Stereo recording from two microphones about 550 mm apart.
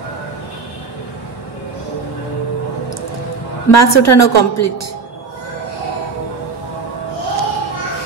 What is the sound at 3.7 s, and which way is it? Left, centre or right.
A woman's voice, left.